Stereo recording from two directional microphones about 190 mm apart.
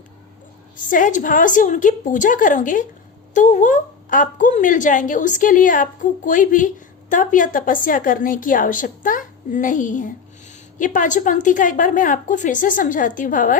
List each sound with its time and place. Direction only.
0.8 s a woman's voice: 45° left (ahead or behind)